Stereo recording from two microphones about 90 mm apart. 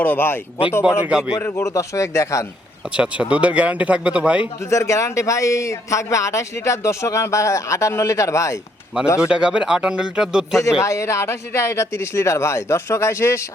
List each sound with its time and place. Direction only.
0.0 s speech: 20° left (ahead or behind)
1.0 s speech: 10° right (ahead or behind)
1.4 s a man's voice: 30° left (ahead or behind)
2.9 s speech: 10° right (ahead or behind)
4.7 s a man's voice: 35° left (ahead or behind)
9.2 s speech: 10° right (ahead or behind)
10.8 s a man's voice: 35° left (ahead or behind)